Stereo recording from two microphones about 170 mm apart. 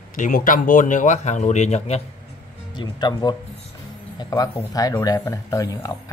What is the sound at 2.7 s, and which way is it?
A man's voice, 25° left (ahead or behind).